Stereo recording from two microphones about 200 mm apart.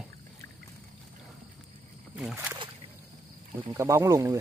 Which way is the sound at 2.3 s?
10° right (ahead or behind).